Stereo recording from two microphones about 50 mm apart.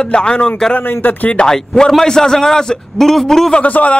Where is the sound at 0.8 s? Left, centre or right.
Left.